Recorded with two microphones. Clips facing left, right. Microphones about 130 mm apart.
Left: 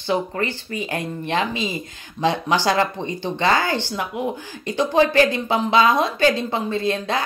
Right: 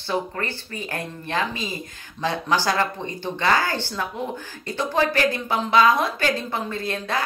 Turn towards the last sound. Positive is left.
turn(degrees=20)  # may be behind; listen again after turning